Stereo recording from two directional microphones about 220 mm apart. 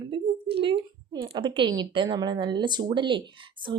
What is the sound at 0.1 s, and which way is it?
Speech, 25° right (ahead or behind).